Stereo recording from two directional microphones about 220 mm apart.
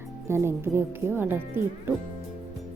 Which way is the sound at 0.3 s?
10° right (ahead or behind).